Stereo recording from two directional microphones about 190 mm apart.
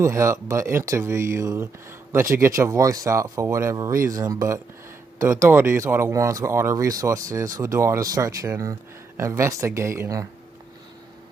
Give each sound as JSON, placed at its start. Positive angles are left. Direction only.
{"t": 0.0, "sound": "speech", "side_deg": -15}